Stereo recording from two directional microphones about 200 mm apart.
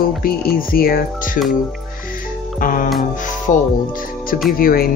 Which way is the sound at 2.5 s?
40° left (ahead or behind).